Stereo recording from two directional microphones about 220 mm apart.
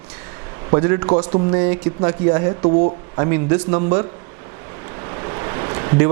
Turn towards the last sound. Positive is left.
turn(degrees=-15)  # may be behind; listen again after turning